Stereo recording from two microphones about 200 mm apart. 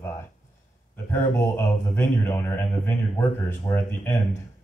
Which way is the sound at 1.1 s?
15° left (ahead or behind).